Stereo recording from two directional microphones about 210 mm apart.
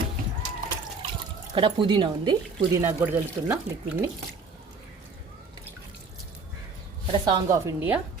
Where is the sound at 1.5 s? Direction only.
25° right (ahead or behind).